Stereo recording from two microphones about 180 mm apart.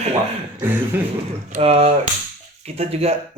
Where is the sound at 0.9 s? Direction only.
10° right (ahead or behind).